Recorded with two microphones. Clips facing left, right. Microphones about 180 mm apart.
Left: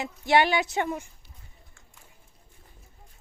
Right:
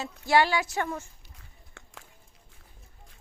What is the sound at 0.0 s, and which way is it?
Speech, 20° left (ahead or behind).